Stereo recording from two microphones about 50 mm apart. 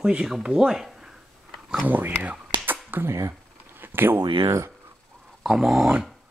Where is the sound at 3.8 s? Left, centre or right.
Right.